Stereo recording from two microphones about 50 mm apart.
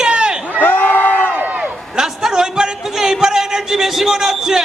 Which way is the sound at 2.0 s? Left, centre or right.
Centre.